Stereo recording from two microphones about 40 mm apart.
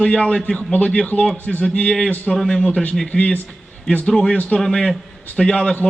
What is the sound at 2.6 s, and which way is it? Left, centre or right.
Speech, left.